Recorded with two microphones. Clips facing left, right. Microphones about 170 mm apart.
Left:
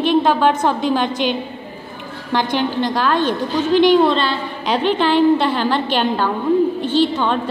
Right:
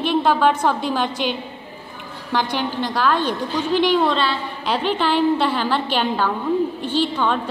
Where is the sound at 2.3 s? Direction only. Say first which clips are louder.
Left 4 dB; 10° right (ahead or behind).